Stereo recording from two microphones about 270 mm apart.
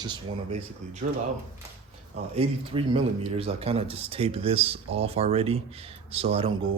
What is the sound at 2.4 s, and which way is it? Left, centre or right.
Speech, centre.